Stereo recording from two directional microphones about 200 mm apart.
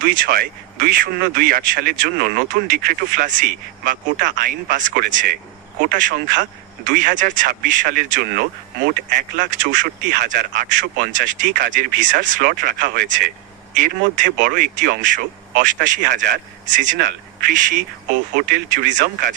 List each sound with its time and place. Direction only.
0.0 s speech: 45° right (ahead or behind)